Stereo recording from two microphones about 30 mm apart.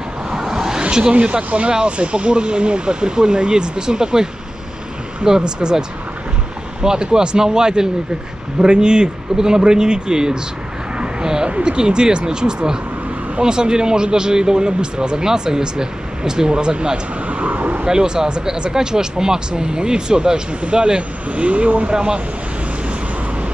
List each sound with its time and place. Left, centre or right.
0.3 s vehicle: centre
0.8 s a sound: right
1.1 s speech: right
11.0 s a sound: right
11.5 s speech: right
17.3 s a sound: right
17.8 s speech: right
21.3 s speech: right
21.9 s speech: right